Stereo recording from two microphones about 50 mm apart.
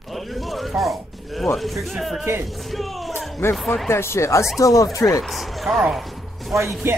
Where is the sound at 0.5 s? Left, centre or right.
Centre.